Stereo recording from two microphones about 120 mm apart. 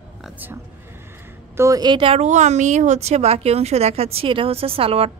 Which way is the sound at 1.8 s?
45° right (ahead or behind).